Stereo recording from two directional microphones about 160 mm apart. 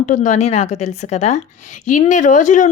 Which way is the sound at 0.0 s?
50° left (ahead or behind).